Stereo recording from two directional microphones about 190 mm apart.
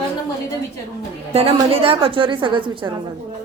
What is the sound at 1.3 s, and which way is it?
A woman's voice, 30° right (ahead or behind).